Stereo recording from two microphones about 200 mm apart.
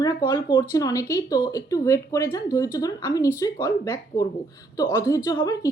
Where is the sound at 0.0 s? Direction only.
20° left (ahead or behind).